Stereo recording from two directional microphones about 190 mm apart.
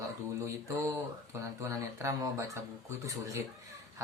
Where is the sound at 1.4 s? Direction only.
15° right (ahead or behind).